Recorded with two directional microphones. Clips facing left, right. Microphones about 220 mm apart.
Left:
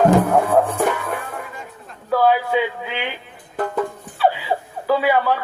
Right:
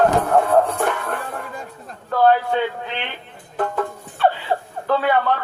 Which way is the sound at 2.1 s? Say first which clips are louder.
Right 1 dB; 5° left (ahead or behind).